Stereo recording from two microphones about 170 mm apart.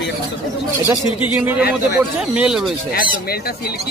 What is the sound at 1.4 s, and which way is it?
Speech, 10° right (ahead or behind).